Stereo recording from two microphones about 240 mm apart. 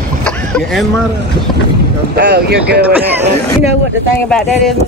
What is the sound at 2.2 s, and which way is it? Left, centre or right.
Speech, right.